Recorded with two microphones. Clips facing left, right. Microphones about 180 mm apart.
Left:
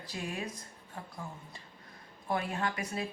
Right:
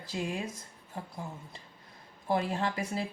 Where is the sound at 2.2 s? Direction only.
25° right (ahead or behind).